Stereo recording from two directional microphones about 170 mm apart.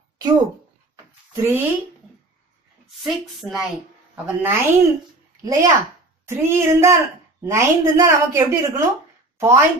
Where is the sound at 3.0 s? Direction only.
Centre (ahead or behind).